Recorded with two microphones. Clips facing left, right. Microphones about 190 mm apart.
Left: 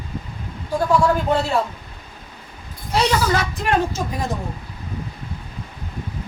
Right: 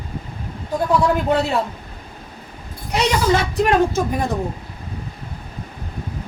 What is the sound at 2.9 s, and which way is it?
Speech, 25° right (ahead or behind).